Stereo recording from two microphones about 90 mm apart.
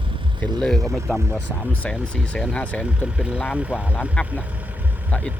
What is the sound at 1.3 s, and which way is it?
Speech, 15° left (ahead or behind).